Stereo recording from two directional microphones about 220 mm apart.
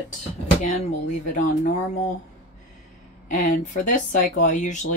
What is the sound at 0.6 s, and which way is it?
Speech, 30° left (ahead or behind).